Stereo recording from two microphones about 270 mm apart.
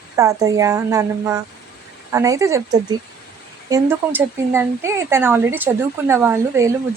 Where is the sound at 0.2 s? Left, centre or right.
Centre.